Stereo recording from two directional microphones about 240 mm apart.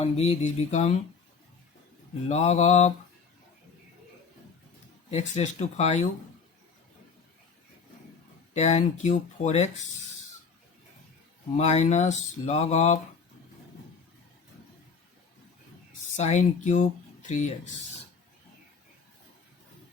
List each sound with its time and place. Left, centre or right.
0.0 s speech: left
2.3 s speech: left
5.1 s speech: left
8.5 s speech: left
11.5 s speech: left
16.1 s speech: left